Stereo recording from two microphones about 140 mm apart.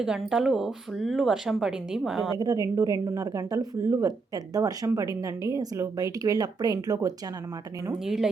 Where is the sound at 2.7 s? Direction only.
20° right (ahead or behind).